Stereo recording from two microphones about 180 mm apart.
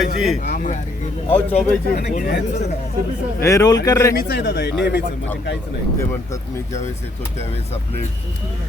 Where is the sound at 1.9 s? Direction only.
50° left (ahead or behind).